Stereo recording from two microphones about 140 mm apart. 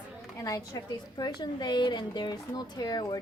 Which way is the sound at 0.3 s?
25° left (ahead or behind).